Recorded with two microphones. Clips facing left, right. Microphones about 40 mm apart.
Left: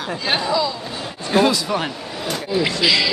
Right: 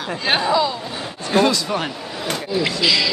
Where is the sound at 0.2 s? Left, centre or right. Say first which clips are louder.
Right 3 dB; right.